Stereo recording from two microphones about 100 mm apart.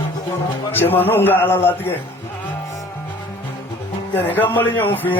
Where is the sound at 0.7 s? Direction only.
20° left (ahead or behind).